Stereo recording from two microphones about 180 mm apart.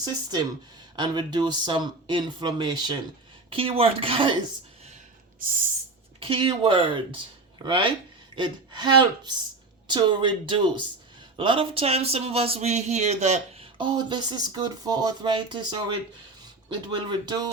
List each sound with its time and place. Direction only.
0.0 s speech: 20° right (ahead or behind)
6.1 s speech: 30° right (ahead or behind)